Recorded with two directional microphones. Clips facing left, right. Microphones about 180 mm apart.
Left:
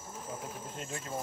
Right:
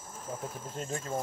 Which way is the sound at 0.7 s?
40° right (ahead or behind).